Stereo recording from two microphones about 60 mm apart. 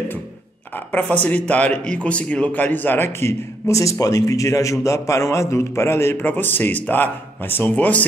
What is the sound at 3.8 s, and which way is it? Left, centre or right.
A man's voice, left.